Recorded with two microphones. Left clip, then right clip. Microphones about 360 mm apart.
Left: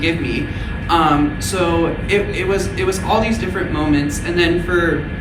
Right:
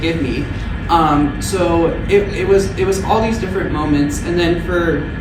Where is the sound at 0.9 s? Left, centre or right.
Centre.